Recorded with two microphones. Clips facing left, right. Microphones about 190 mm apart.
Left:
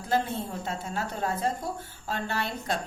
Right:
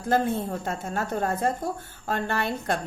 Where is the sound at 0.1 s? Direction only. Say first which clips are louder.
Right 4 dB; 50° right (ahead or behind).